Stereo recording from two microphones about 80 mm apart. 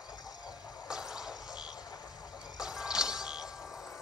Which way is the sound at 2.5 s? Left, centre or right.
Centre.